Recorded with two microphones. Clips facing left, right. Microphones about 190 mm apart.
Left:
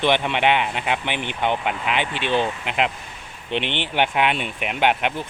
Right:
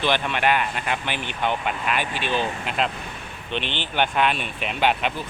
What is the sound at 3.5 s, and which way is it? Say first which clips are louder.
Speech: left 4 dB; 70° left (ahead or behind).